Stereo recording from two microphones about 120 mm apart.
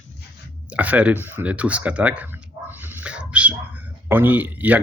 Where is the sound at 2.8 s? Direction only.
15° right (ahead or behind).